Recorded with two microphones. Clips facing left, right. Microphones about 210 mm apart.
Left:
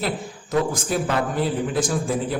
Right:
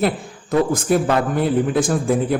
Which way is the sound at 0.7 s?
55° right (ahead or behind).